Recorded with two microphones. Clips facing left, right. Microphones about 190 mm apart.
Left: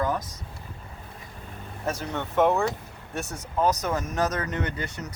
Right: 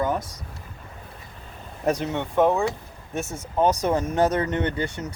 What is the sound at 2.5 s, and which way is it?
Speech, 15° right (ahead or behind).